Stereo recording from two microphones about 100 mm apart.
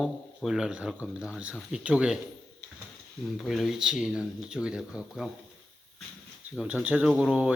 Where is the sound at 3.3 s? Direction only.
Centre (ahead or behind).